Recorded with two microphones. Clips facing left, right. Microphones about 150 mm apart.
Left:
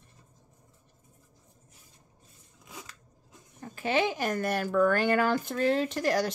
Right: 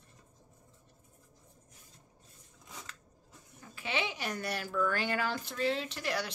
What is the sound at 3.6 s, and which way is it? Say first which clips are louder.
Speech: left 9 dB; 45° left (ahead or behind).